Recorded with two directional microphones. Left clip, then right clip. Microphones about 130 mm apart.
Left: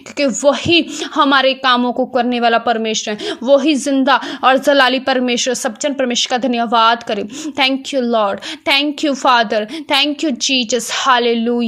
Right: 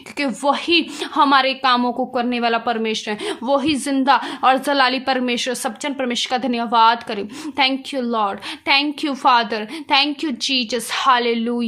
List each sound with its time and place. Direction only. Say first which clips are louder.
0.2 s a woman's voice: left 6 dB; 20° left (ahead or behind)